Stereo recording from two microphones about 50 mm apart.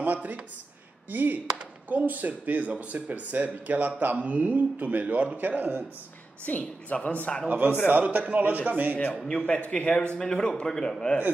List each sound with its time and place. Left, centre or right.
0.0 s a sound: right
1.1 s speech: right
6.4 s a man's voice: left
7.4 s speech: right
9.2 s a man's voice: centre